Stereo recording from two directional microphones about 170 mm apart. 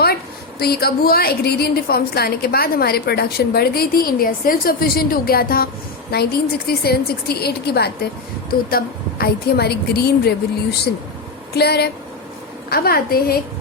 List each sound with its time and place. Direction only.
0.6 s a woman's voice: 65° left (ahead or behind)